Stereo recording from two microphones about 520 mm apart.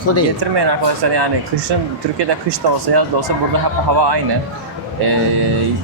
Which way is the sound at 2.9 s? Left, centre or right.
Right.